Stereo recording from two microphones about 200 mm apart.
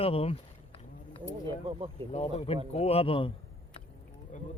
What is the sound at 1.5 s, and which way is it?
Speech, 25° right (ahead or behind).